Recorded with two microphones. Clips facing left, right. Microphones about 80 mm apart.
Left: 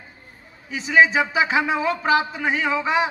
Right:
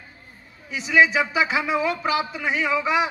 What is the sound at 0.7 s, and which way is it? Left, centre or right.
A man's voice, left.